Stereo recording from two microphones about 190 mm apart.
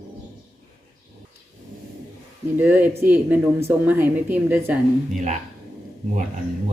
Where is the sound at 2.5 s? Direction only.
10° right (ahead or behind).